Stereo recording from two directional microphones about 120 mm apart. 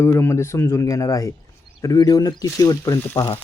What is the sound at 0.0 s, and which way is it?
Speech, 20° left (ahead or behind).